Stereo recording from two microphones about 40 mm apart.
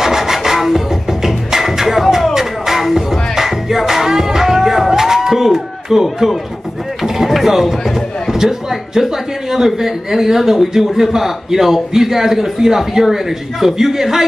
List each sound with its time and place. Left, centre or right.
0.0 s music: centre
7.0 s mechanisms: centre
8.3 s speech: centre